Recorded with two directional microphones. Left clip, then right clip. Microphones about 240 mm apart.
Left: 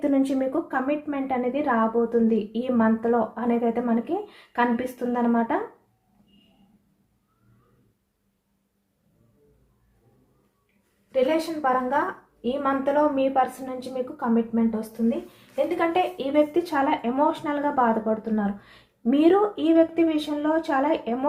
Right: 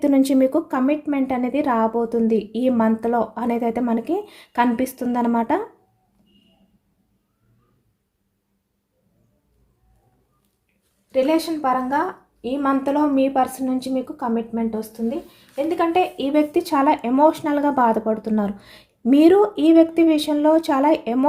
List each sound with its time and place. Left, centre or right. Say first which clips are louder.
0.0 s speech: right 6 dB; right
12.4 s speech: right 3 dB; right